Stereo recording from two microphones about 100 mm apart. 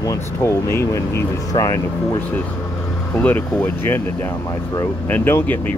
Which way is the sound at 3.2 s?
20° left (ahead or behind).